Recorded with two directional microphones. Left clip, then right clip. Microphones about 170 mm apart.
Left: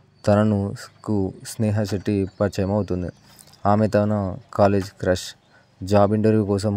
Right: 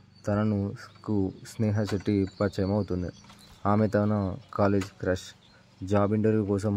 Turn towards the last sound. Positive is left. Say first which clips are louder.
# left 6 dB
turn(degrees=20)  # may be behind; listen again after turning